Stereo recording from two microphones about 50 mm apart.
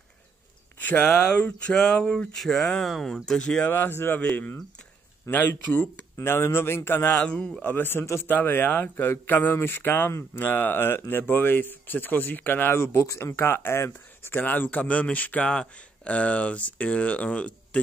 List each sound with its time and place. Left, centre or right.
0.7 s a sound: left
1.0 s speech: centre
2.3 s speech: centre
3.3 s speech: centre
3.6 s speech: left
5.5 s speech: left
7.1 s speech: left
7.6 s speech: left
12.7 s speech: left
14.4 s speech: left
15.4 s speech: centre